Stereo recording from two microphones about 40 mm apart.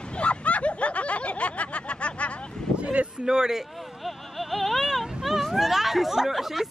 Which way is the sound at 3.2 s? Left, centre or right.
Centre.